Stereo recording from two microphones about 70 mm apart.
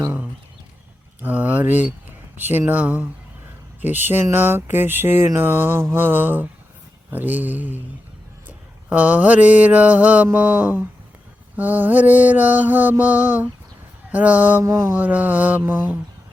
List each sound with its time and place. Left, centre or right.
1.2 s speech: right
3.8 s a sound: right
5.9 s mantra: right